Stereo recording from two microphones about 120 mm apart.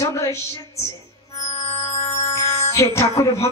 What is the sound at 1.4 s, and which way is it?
Music, 65° left (ahead or behind).